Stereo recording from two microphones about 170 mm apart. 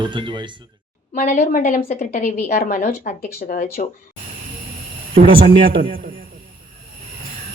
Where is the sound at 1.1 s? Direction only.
45° left (ahead or behind).